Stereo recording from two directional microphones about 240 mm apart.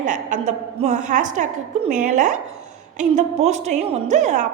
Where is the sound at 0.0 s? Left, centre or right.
Right.